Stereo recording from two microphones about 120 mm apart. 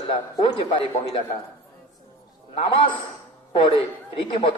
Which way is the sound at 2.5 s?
50° left (ahead or behind).